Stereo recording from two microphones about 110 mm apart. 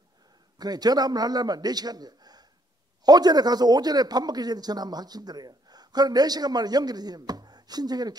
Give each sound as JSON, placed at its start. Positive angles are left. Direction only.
{"t": 0.6, "sound": "speech", "side_deg": -35}